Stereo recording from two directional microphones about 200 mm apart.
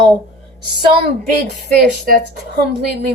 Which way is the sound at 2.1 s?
45° right (ahead or behind).